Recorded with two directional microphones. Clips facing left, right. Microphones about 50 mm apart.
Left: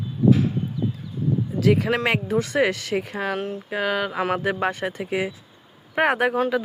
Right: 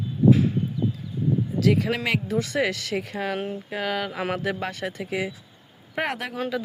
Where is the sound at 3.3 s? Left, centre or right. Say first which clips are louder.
Left 1 dB; centre.